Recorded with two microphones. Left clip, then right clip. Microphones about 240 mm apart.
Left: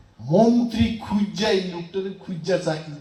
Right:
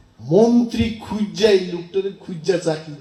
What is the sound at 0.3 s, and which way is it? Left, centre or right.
Speech, right.